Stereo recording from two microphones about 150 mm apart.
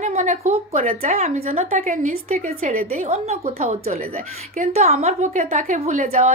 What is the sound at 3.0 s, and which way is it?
A woman's voice, 45° right (ahead or behind).